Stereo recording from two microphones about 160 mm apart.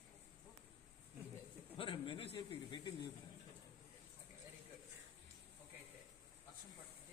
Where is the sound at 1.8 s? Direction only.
30° left (ahead or behind).